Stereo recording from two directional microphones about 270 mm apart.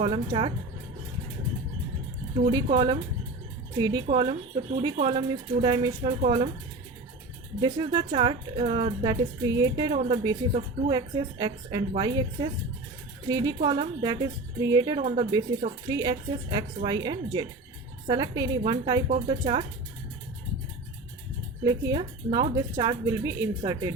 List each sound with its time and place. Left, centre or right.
0.0 s speech: centre
2.7 s speech: centre
7.6 s speech: centre
21.6 s speech: centre